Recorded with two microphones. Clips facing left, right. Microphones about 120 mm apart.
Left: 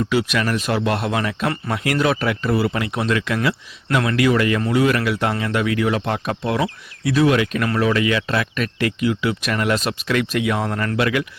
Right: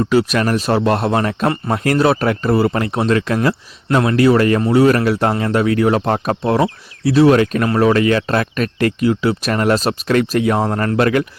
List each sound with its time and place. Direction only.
0.0 s speech: 40° right (ahead or behind)